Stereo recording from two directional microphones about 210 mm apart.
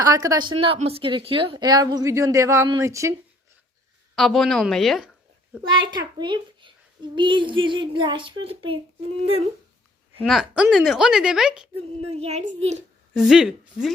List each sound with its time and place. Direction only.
0.0 s a woman's voice: 15° right (ahead or behind)
4.1 s a woman's voice: centre (ahead or behind)
5.8 s a woman's voice: 20° right (ahead or behind)
10.2 s a woman's voice: centre (ahead or behind)
12.1 s a child's voice: 30° right (ahead or behind)
13.1 s a woman's voice: centre (ahead or behind)